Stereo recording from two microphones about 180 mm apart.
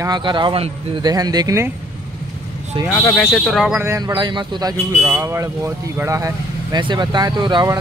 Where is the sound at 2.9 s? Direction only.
10° left (ahead or behind).